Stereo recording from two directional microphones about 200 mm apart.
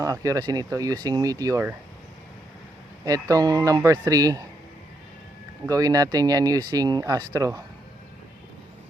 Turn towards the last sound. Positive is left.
turn(degrees=-15)  # may be behind; listen again after turning